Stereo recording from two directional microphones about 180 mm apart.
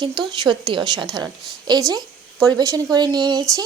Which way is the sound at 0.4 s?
25° right (ahead or behind).